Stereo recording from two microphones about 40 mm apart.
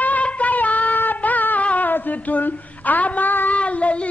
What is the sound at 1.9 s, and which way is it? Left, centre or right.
Female singing, left.